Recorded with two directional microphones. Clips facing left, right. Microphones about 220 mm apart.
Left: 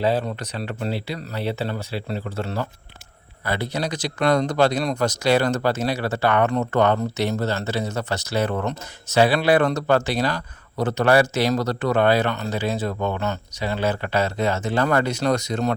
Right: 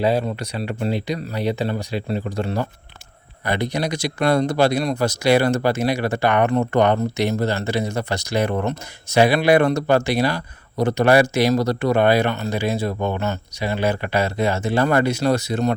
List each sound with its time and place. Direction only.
0.0 s speech: 10° right (ahead or behind)